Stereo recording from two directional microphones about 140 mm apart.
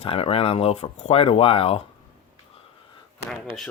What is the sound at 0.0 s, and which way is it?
Speech, 45° left (ahead or behind).